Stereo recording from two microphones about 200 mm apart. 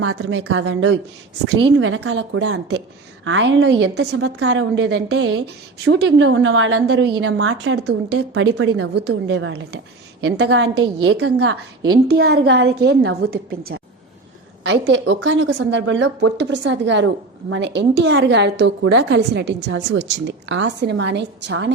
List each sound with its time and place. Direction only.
0.0 s a woman's voice: 90° right
6.8 s a woman's voice: 55° right (ahead or behind)
7.2 s a woman's voice: 90° right; by 11.3 s 75° right (ahead or behind)
12.0 s a woman's voice: 55° right (ahead or behind)
14.6 s a woman's voice: 65° right (ahead or behind)